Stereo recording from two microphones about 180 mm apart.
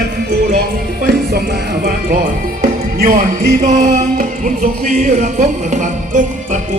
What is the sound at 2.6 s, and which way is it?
Music, 50° right (ahead or behind).